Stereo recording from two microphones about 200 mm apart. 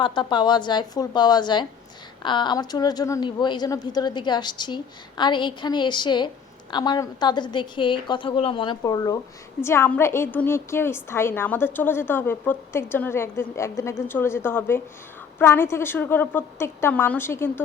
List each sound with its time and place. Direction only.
0.0 s a woman's voice: 20° left (ahead or behind)